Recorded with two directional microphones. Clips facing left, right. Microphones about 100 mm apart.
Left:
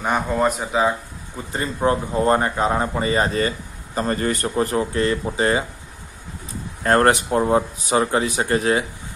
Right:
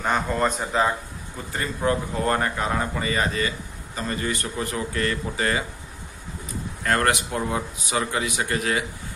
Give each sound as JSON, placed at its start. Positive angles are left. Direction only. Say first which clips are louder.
{"t": 0.0, "sound": "a man's voice", "louder": "left 3 dB", "side_deg": 10}
{"t": 1.5, "sound": "a man's voice", "louder": "left 4 dB", "side_deg": 25}
{"t": 6.8, "sound": "speech", "louder": "left 6 dB", "side_deg": 35}